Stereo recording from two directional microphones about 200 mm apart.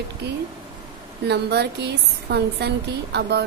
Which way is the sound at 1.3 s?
55° right (ahead or behind).